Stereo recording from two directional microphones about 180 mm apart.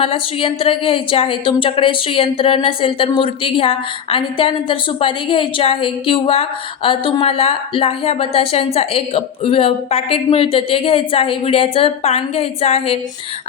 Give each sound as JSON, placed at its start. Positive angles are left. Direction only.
{"t": 0.0, "sound": "speech", "side_deg": 30}